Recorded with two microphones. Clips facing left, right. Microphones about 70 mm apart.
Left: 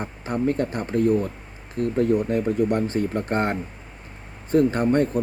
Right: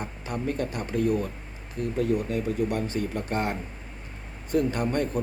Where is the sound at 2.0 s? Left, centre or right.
Left.